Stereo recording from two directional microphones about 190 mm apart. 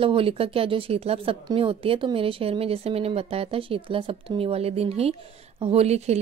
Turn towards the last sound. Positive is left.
turn(degrees=-35)  # may be behind; listen again after turning